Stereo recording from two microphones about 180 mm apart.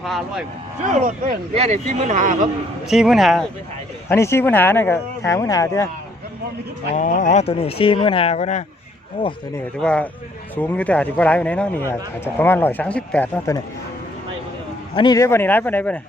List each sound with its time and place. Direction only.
0.0 s speech: centre (ahead or behind)
0.9 s speech: 45° right (ahead or behind)
2.9 s speech: centre (ahead or behind)
4.1 s speech: 15° left (ahead or behind)
6.9 s speech: 45° left (ahead or behind)
9.2 s speech: 25° left (ahead or behind)
9.8 s speech: 5° left (ahead or behind)
14.9 s speech: 20° left (ahead or behind)